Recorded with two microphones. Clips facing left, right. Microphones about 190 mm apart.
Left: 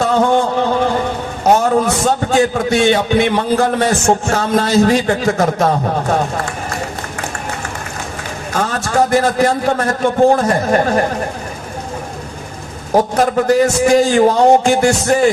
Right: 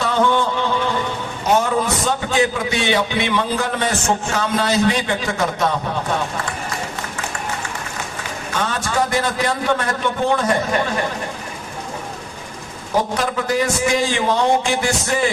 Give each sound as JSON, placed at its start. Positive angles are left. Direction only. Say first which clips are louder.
{"t": 0.0, "sound": "a sound", "louder": "left 5 dB", "side_deg": 45}
{"t": 2.0, "sound": "a man's voice", "louder": "left 5 dB", "side_deg": 45}
{"t": 8.5, "sound": "a man's voice", "louder": "left 5 dB", "side_deg": 45}
{"t": 13.1, "sound": "a man's voice", "louder": "left 8 dB", "side_deg": 45}